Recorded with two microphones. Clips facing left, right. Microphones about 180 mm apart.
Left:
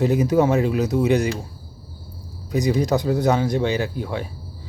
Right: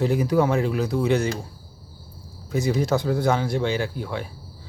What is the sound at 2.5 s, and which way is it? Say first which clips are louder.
Speech: left 2 dB; 15° left (ahead or behind).